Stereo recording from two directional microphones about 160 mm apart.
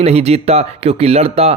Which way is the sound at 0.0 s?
40° right (ahead or behind).